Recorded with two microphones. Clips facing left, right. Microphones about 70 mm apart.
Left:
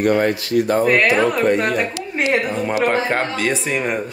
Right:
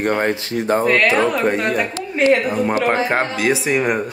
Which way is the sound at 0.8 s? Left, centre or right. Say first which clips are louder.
Even; centre.